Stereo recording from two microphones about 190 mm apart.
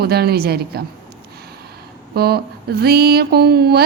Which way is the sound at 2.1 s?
55° right (ahead or behind).